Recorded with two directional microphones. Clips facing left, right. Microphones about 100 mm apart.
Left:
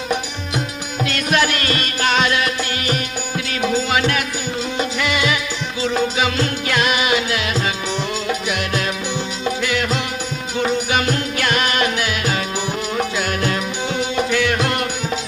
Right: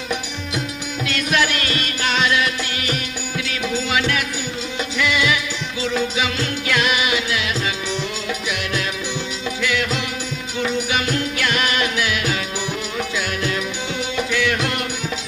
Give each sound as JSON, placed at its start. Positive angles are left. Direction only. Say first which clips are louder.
{"t": 1.0, "sound": "music", "louder": "left 2 dB", "side_deg": 45}